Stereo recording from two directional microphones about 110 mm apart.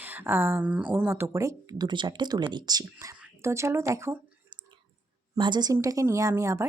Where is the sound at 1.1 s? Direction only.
25° right (ahead or behind).